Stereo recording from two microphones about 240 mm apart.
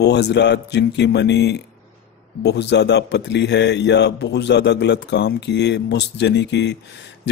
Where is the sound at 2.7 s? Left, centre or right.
Left.